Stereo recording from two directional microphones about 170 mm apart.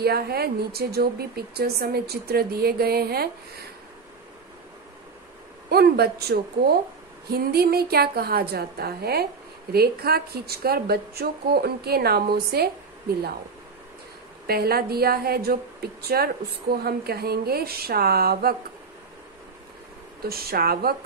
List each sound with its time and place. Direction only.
0.0 s speech: 65° right (ahead or behind)
5.7 s a woman's voice: 70° right (ahead or behind)
14.5 s a woman's voice: 65° right (ahead or behind)
20.2 s a woman's voice: 65° right (ahead or behind)